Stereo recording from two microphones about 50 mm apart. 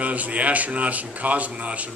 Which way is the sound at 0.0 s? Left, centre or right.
Right.